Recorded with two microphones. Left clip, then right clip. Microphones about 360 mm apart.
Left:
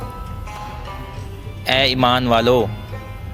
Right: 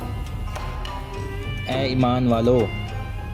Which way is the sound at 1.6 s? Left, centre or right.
Left.